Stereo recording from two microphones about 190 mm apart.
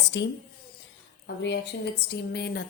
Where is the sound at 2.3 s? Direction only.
55° left (ahead or behind).